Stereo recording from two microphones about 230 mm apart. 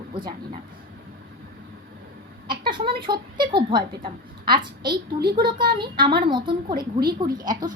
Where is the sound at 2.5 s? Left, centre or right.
Centre.